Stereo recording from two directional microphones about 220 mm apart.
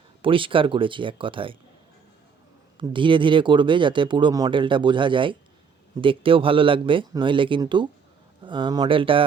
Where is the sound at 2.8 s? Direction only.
20° right (ahead or behind).